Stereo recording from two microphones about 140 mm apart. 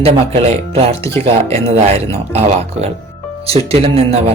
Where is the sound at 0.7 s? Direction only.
45° right (ahead or behind).